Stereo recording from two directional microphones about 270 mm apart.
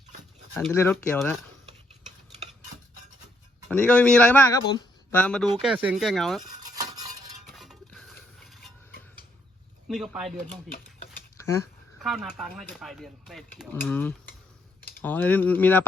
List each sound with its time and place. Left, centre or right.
0.7 s speech: centre
3.7 s speech: centre
6.6 s stir: centre
7.4 s a sound: centre
9.9 s speech: centre
11.3 s a sound: centre
12.0 s speech: centre
14.8 s typing: left
15.0 s speech: centre